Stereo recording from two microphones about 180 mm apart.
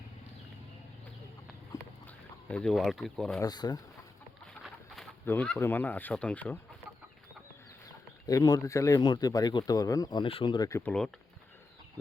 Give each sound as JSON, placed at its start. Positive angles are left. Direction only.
{"t": 1.7, "sound": "a sound", "side_deg": 20}
{"t": 2.0, "sound": "speech", "side_deg": 5}
{"t": 3.4, "sound": "speech", "side_deg": 20}
{"t": 5.2, "sound": "speech", "side_deg": 10}
{"t": 8.3, "sound": "speech", "side_deg": 20}